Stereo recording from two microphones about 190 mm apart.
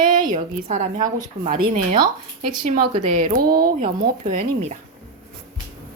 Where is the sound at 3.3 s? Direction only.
55° right (ahead or behind).